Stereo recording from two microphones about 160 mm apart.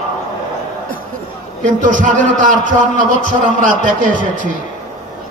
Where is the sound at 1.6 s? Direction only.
55° right (ahead or behind).